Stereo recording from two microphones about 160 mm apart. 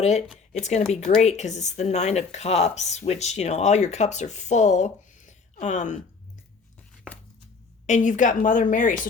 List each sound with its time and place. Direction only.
0.6 s speech: 45° left (ahead or behind)
7.9 s a woman's voice: 50° left (ahead or behind)